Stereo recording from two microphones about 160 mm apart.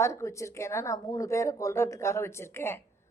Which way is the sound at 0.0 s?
20° left (ahead or behind).